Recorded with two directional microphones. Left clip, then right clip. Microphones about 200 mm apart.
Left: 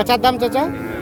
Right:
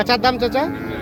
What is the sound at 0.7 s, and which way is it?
Speech, 50° right (ahead or behind).